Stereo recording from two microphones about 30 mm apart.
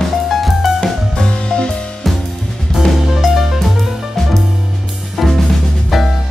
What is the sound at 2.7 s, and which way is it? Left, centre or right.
Music, centre.